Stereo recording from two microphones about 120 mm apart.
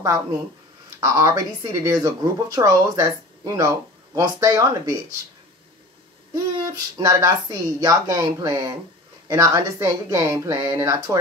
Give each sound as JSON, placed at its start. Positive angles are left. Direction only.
{"t": 1.0, "sound": "speech", "side_deg": -30}
{"t": 6.3, "sound": "speech", "side_deg": -30}